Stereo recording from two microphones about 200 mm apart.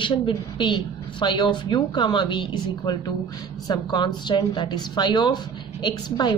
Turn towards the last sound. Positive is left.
turn(degrees=20)  # may be behind; listen again after turning